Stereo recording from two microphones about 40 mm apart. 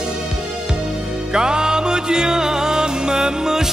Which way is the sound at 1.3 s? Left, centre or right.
Centre.